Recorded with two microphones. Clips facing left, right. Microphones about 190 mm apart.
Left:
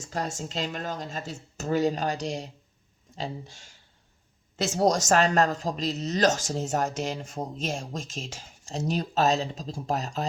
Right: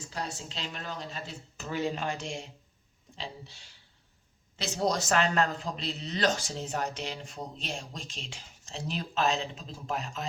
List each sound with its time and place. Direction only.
0.1 s speech: 45° left (ahead or behind)